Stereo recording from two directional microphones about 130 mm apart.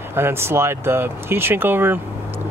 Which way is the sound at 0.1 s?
20° right (ahead or behind).